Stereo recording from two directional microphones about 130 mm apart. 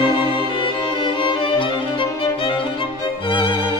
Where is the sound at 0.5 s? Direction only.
40° left (ahead or behind).